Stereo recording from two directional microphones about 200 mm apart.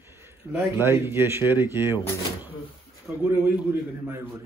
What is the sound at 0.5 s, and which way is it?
A man's voice, 10° right (ahead or behind).